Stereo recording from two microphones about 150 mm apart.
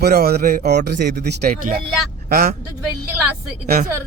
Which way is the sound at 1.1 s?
85° right.